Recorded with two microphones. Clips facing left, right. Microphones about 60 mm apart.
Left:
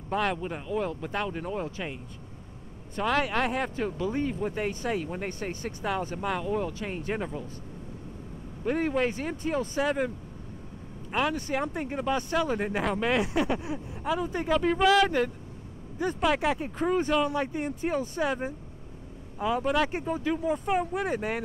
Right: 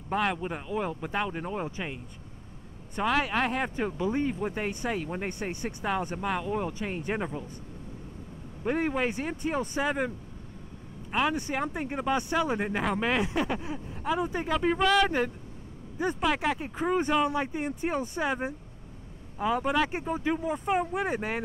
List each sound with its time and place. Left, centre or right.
0.1 s speech: centre
3.0 s speech: centre
3.6 s speech: centre
5.1 s speech: centre
6.2 s speech: centre
6.5 s speech: centre
8.6 s speech: centre
15.0 s speech: centre
16.2 s speech: centre
17.9 s speech: right
18.2 s speech: centre
20.2 s speech: centre
20.4 s speech: centre